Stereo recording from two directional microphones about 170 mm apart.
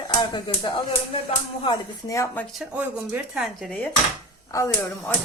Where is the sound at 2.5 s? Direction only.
5° right (ahead or behind).